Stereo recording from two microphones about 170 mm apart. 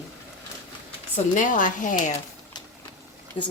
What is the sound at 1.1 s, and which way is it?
Speech, 50° left (ahead or behind).